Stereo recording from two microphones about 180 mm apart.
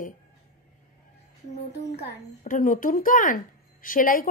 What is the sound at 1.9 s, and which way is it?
Speech, 50° left (ahead or behind).